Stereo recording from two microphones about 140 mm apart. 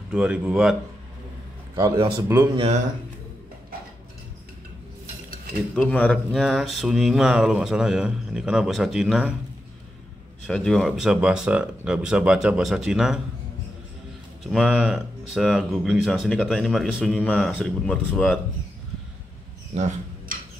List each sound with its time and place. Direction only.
0.1 s speech: 10° right (ahead or behind)
1.8 s speech: 30° right (ahead or behind)
2.2 s speech: 15° right (ahead or behind)
5.8 s a man's voice: 5° left (ahead or behind)
10.4 s speech: 5° left (ahead or behind)
14.5 s speech: 5° right (ahead or behind)